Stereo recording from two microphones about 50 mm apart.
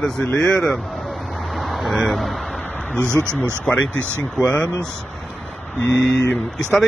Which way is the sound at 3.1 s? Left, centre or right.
Right.